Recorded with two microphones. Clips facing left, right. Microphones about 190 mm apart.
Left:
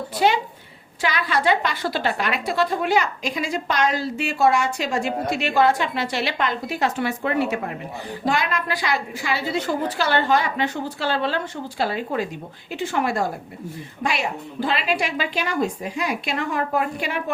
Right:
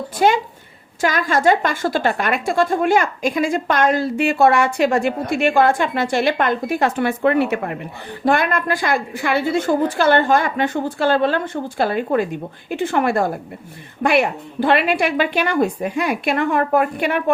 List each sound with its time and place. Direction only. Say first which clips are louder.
1.0 s a woman's voice: right 5 dB; 45° right (ahead or behind)